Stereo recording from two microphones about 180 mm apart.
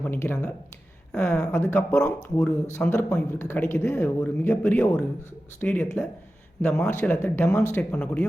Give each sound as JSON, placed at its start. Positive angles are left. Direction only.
{"t": 0.0, "sound": "speech", "side_deg": 10}